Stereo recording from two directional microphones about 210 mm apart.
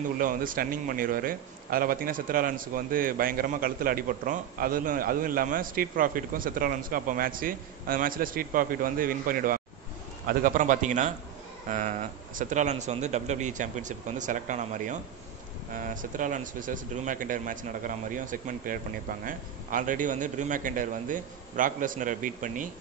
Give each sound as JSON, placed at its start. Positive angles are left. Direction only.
{"t": 0.2, "sound": "a man's voice", "side_deg": -40}